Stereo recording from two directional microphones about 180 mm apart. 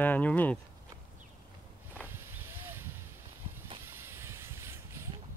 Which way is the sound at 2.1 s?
15° right (ahead or behind).